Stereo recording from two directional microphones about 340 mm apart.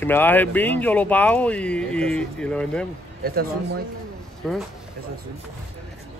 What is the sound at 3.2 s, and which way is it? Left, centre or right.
Speech, right.